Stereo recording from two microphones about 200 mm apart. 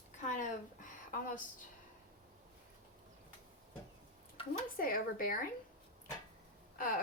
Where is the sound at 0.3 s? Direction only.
40° left (ahead or behind).